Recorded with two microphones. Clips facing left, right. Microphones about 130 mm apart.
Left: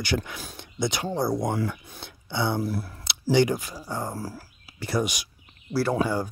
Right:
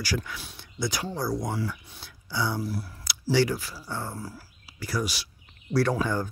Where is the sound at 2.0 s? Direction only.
25° left (ahead or behind).